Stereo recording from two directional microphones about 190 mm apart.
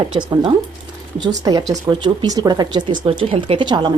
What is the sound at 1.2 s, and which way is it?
Speech, 20° right (ahead or behind).